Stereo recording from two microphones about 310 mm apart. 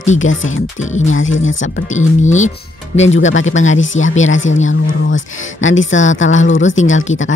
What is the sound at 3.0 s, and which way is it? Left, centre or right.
Speech, left.